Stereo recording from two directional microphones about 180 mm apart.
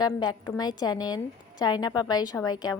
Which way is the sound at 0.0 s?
25° left (ahead or behind).